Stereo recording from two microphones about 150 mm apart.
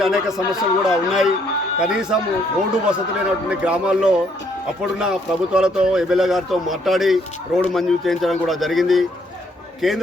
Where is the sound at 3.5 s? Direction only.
5° right (ahead or behind).